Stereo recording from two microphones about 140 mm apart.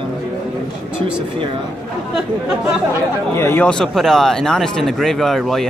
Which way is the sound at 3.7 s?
5° left (ahead or behind).